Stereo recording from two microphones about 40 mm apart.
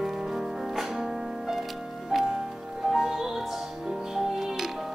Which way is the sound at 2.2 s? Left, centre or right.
Centre.